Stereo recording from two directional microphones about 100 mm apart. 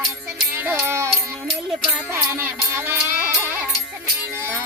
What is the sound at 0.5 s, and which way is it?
Music, 20° right (ahead or behind).